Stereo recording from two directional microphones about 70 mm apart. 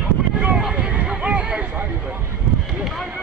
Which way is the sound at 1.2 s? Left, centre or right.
Centre.